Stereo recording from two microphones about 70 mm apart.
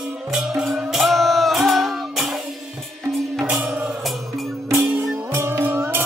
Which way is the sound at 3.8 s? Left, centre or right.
Centre.